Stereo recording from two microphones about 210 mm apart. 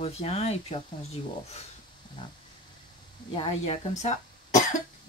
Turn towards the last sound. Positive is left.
turn(degrees=35)  # may be behind; listen again after turning